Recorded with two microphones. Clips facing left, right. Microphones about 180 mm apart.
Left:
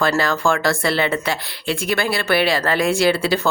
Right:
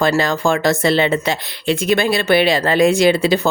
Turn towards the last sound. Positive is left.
turn(degrees=-20)  # may be behind; listen again after turning